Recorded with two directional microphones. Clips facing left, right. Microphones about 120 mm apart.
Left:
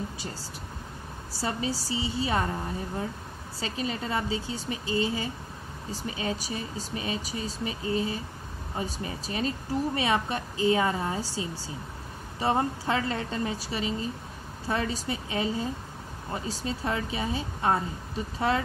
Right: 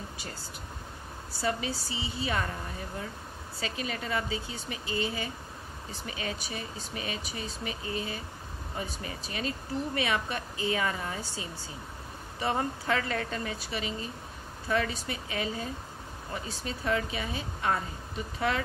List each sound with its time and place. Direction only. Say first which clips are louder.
1.3 s speech: left 1 dB; 35° left (ahead or behind)
3.5 s speech: left 3 dB; 30° left (ahead or behind)